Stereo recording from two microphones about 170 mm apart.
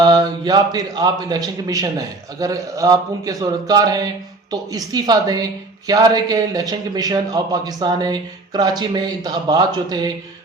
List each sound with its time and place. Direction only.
0.0 s a man's voice: 25° right (ahead or behind)